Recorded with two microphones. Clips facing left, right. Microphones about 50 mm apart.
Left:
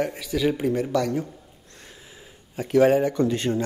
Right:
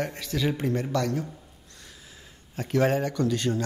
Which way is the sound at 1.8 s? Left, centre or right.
Left.